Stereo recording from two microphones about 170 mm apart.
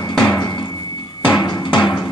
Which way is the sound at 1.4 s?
25° left (ahead or behind).